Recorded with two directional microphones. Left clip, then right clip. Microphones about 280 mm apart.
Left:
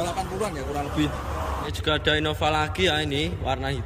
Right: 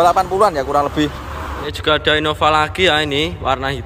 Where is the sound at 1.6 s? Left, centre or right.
Centre.